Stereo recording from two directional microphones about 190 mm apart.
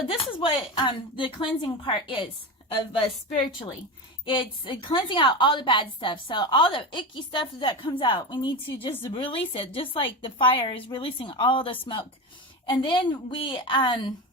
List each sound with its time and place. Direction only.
0.1 s a woman's voice: 30° left (ahead or behind)
4.3 s a woman's voice: 25° left (ahead or behind)